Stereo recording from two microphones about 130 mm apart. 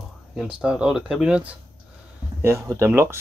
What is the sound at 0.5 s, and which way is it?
Speech, 5° right (ahead or behind).